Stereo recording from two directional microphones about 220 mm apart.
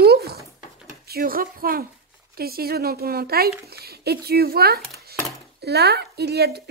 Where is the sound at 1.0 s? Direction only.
45° right (ahead or behind).